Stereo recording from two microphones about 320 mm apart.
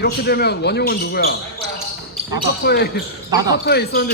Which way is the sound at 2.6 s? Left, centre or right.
Left.